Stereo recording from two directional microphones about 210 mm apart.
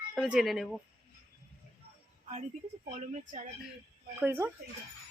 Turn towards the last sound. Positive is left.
turn(degrees=-10)  # may be behind; listen again after turning